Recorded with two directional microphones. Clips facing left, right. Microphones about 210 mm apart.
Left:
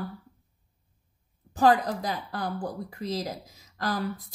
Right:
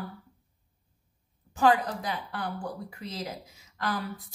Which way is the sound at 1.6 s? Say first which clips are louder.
Left 2 dB; 40° left (ahead or behind).